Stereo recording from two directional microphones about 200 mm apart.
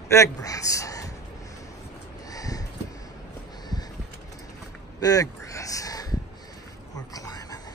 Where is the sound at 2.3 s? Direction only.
15° left (ahead or behind).